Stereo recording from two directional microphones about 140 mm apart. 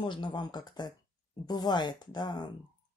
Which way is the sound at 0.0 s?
35° left (ahead or behind).